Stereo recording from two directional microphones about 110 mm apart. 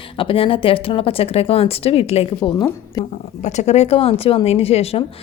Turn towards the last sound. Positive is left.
turn(degrees=65)  # may be behind; listen again after turning